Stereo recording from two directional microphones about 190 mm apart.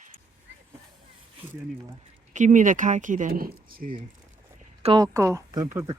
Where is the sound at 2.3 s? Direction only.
40° right (ahead or behind).